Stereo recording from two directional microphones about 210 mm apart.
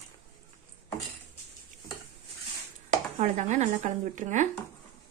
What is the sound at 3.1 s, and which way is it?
Speech, 35° right (ahead or behind).